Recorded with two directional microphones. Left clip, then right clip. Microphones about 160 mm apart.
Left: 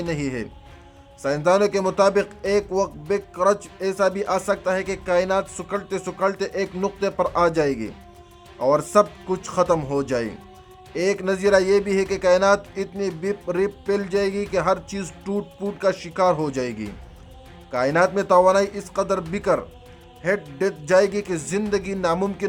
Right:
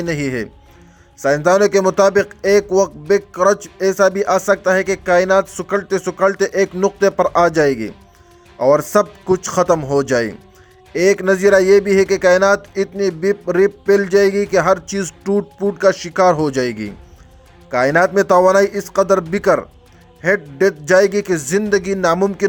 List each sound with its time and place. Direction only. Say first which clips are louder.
0.0 s a man's voice: right 6 dB; 30° right (ahead or behind)